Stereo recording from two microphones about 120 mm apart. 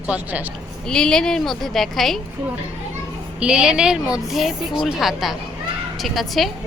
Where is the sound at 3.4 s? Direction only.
5° right (ahead or behind).